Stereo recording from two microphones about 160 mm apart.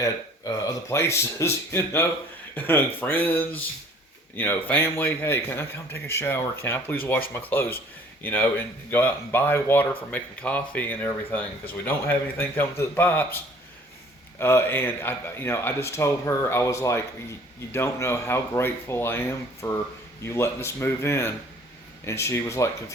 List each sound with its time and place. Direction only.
0.0 s speech: 20° left (ahead or behind)